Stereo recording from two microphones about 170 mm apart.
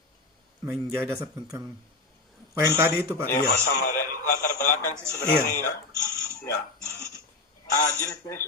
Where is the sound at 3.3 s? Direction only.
55° left (ahead or behind).